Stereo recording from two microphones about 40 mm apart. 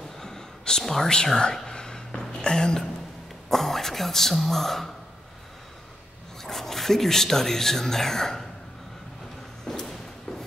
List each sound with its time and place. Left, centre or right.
0.2 s a sound: centre
0.8 s speech: centre
1.1 s a sound: centre
3.4 s speech: centre
6.4 s speech: centre
9.7 s thump: centre